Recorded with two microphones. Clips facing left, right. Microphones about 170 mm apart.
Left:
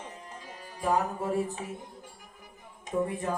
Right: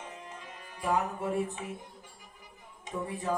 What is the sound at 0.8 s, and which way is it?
Music, 35° left (ahead or behind).